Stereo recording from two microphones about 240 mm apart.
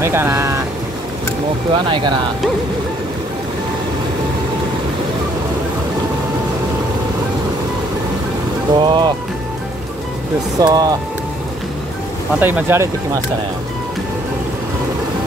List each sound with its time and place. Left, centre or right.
0.0 s speech: centre
8.7 s speech: centre
10.6 s speech: centre
12.4 s speech: centre